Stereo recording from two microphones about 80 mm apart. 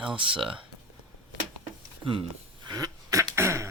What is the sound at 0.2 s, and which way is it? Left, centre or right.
Speech, right.